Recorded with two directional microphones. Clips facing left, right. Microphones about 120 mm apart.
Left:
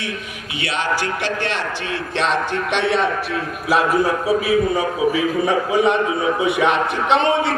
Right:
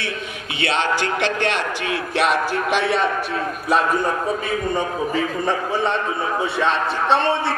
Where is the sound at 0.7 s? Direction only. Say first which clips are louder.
Right 1 dB; 25° right (ahead or behind).